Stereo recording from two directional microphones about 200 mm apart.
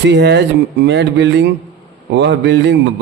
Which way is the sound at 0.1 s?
60° right (ahead or behind).